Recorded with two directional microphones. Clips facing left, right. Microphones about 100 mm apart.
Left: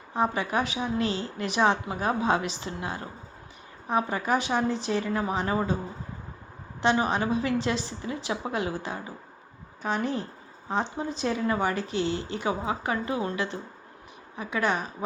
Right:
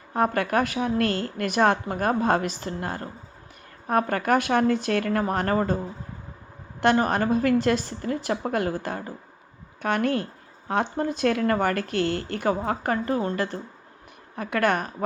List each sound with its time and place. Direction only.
0.1 s a woman's voice: 55° right (ahead or behind)
3.8 s speech: 60° right (ahead or behind)
6.8 s a woman's voice: 55° right (ahead or behind)
9.8 s speech: 65° right (ahead or behind); by 13.6 s 45° right (ahead or behind)
14.3 s speech: 60° right (ahead or behind)